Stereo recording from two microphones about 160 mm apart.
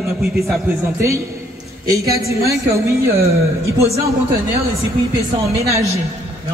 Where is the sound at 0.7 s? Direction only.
15° right (ahead or behind).